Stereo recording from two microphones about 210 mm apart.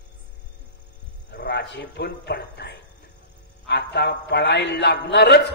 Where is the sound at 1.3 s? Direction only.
50° left (ahead or behind).